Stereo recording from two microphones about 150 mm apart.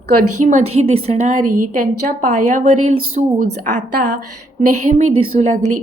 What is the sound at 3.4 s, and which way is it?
Speech, 65° right (ahead or behind).